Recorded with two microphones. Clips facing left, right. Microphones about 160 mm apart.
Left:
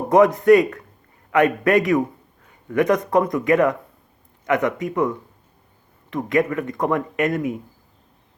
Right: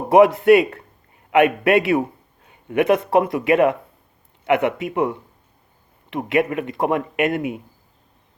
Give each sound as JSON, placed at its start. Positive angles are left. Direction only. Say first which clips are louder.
{"t": 0.3, "sound": "a man's voice", "louder": "even", "side_deg": -25}